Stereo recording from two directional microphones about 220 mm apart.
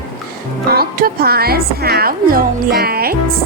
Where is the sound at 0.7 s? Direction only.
45° right (ahead or behind).